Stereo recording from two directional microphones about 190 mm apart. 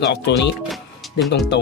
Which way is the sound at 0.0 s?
65° left (ahead or behind).